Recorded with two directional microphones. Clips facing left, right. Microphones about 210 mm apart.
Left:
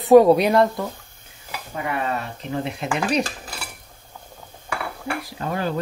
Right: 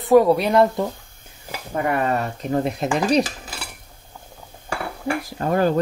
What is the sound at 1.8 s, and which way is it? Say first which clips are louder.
Speech: right 5 dB; 50° right (ahead or behind).